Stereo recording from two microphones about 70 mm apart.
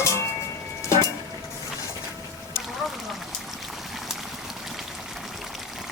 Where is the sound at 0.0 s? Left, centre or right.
Left.